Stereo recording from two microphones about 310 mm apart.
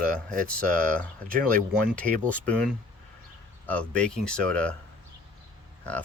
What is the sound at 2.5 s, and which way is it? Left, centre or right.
Speech, centre.